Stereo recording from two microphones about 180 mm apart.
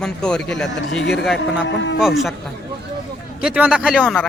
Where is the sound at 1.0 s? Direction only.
70° left (ahead or behind).